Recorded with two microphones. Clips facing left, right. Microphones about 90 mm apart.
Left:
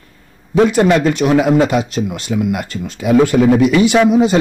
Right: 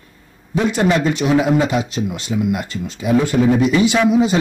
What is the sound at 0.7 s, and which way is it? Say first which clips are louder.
Speech: left 1 dB; 55° left (ahead or behind).